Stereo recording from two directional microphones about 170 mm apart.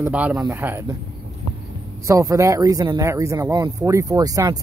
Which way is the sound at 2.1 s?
20° right (ahead or behind).